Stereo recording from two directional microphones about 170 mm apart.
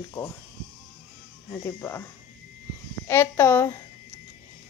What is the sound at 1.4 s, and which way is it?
Speech, 15° left (ahead or behind).